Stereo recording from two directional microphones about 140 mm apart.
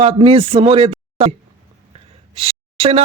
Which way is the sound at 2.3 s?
45° right (ahead or behind).